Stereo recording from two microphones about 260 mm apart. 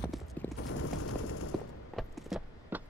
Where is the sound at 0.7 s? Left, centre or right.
Left.